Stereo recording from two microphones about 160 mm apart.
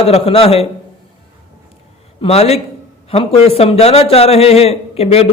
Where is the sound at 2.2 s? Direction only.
40° left (ahead or behind).